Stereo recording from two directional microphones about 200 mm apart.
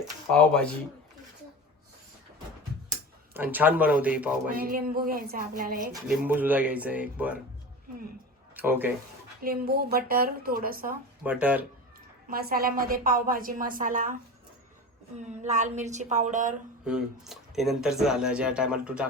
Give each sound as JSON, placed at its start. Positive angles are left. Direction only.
{"t": 0.3, "sound": "speech", "side_deg": 5}
{"t": 3.3, "sound": "speech", "side_deg": -10}
{"t": 4.4, "sound": "a woman's voice", "side_deg": -45}
{"t": 6.1, "sound": "speech", "side_deg": -10}
{"t": 8.5, "sound": "speech", "side_deg": -10}
{"t": 9.4, "sound": "a woman's voice", "side_deg": -45}
{"t": 11.2, "sound": "speech", "side_deg": -5}
{"t": 12.3, "sound": "a woman's voice", "side_deg": -50}
{"t": 15.2, "sound": "speech", "side_deg": -35}
{"t": 16.8, "sound": "speech", "side_deg": 0}